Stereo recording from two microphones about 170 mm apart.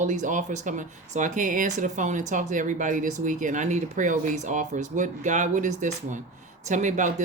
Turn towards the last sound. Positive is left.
turn(degrees=-45)  # may be behind; listen again after turning